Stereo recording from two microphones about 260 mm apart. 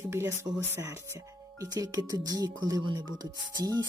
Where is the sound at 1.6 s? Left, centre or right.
Centre.